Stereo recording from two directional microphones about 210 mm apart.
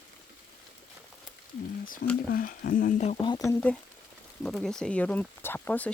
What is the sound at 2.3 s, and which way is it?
Speech, 40° left (ahead or behind).